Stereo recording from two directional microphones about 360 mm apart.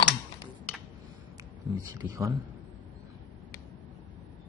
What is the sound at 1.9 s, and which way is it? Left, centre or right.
Speech, centre.